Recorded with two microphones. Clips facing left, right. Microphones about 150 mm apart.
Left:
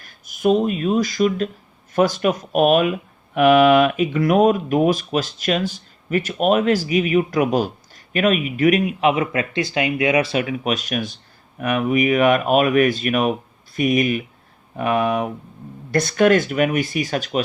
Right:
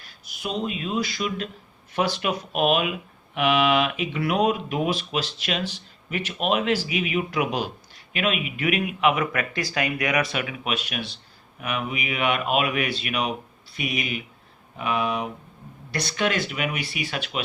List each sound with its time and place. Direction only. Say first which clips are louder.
0.0 s speech: left 14 dB; 45° left (ahead or behind)